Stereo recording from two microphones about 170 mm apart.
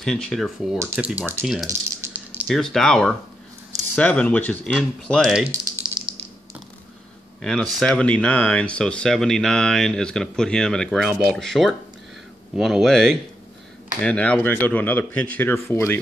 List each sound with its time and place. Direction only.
0.0 s speech: 5° left (ahead or behind)
1.7 s rattle: 10° right (ahead or behind)
2.5 s speech: centre (ahead or behind)
5.4 s speech: 15° right (ahead or behind)
6.1 s typing: 5° right (ahead or behind)
7.4 s speech: 5° left (ahead or behind)